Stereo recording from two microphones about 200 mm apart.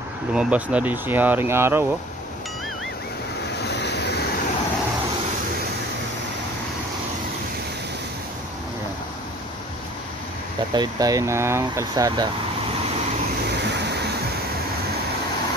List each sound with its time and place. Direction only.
0.3 s speech: 5° right (ahead or behind)
3.6 s vehicle: 55° left (ahead or behind)
10.7 s speech: 20° right (ahead or behind)